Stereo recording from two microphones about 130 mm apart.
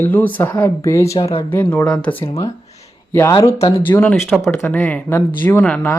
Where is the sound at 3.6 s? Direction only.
15° left (ahead or behind).